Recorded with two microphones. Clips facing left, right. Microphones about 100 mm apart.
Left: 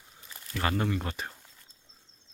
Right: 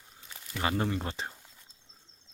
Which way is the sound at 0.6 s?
25° right (ahead or behind).